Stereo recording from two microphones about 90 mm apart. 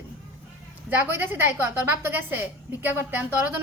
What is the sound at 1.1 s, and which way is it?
A woman's voice, 25° right (ahead or behind).